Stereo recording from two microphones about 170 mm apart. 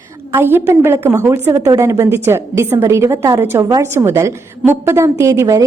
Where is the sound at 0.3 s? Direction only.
15° right (ahead or behind).